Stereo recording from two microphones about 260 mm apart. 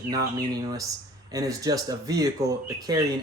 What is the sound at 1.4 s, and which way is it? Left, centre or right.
A woman's voice, centre.